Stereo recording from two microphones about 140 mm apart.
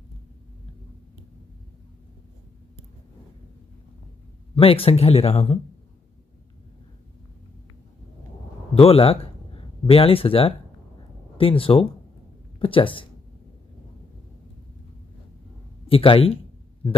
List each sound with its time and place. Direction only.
4.6 s speech: 40° left (ahead or behind)
8.7 s speech: 45° left (ahead or behind)
15.9 s speech: 40° left (ahead or behind)